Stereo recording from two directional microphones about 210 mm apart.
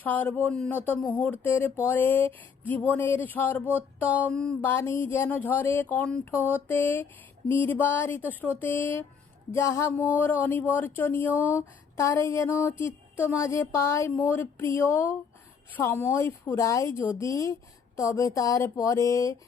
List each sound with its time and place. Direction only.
0.0 s speech: 10° left (ahead or behind)